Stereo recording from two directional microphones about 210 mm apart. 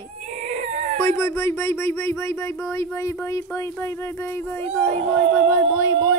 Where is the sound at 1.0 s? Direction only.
15° left (ahead or behind).